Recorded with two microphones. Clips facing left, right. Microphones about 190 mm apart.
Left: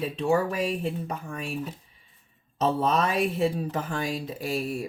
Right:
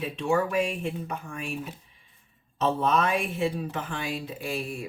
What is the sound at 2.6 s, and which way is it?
Speech, 35° left (ahead or behind).